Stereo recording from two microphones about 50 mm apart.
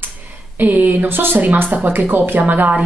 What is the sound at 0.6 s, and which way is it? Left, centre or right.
A woman's voice, right.